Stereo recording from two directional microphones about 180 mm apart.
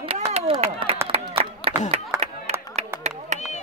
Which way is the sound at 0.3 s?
35° right (ahead or behind).